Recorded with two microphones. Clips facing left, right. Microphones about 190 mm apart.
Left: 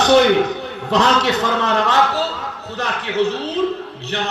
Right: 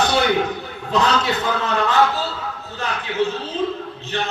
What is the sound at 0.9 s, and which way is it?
A man's voice, 75° left (ahead or behind).